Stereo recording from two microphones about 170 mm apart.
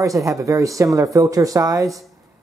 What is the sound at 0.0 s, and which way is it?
Speech, 20° right (ahead or behind).